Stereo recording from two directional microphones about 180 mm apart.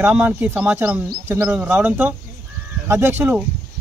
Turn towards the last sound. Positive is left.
turn(degrees=-10)  # may be behind; listen again after turning